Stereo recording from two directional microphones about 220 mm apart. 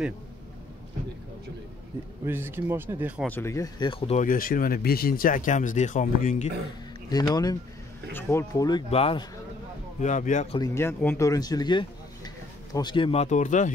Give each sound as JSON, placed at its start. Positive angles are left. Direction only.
{"t": 2.2, "sound": "speech", "side_deg": -10}
{"t": 3.3, "sound": "speech", "side_deg": 10}
{"t": 7.1, "sound": "speech", "side_deg": 20}
{"t": 10.0, "sound": "speech", "side_deg": 35}
{"t": 10.6, "sound": "speech", "side_deg": 10}